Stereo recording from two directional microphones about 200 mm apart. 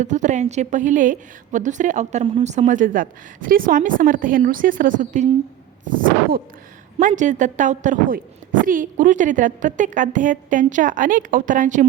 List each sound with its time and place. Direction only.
0.0 s a woman's voice: 35° right (ahead or behind)
5.9 s a sound: 45° right (ahead or behind)
7.0 s a woman's voice: 40° right (ahead or behind)